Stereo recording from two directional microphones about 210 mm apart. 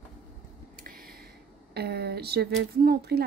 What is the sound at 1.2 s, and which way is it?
Speech, 50° right (ahead or behind).